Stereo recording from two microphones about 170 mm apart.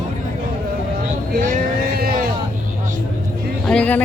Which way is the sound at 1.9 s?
60° right (ahead or behind).